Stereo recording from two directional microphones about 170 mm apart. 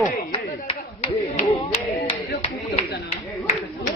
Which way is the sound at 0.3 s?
35° left (ahead or behind).